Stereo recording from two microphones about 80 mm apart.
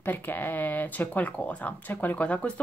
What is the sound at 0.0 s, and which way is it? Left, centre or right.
Speech, left.